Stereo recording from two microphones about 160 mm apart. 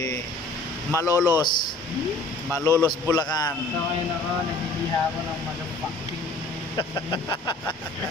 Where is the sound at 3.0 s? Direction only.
25° left (ahead or behind).